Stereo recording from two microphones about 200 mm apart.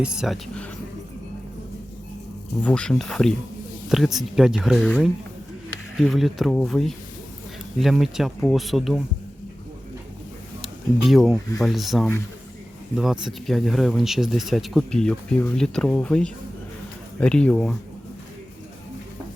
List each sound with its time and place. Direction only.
0.0 s speech: 5° right (ahead or behind)
2.6 s speech: 5° left (ahead or behind)
10.6 s a sound: centre (ahead or behind)
11.6 s speech: centre (ahead or behind)